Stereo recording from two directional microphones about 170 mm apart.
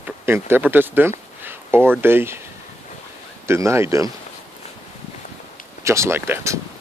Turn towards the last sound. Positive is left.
turn(degrees=-15)  # may be behind; listen again after turning